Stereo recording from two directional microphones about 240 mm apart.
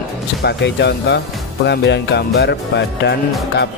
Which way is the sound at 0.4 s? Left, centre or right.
Left.